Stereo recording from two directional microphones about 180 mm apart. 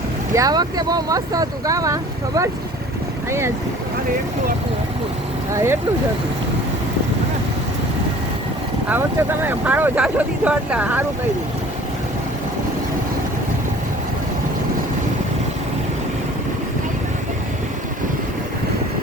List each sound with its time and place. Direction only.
0.3 s speech: 20° right (ahead or behind)
8.9 s speech: 10° right (ahead or behind)